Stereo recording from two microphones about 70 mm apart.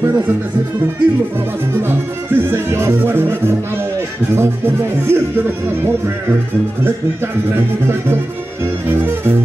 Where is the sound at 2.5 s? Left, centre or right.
Right.